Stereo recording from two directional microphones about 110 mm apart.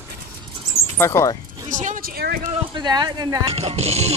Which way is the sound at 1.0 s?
30° left (ahead or behind).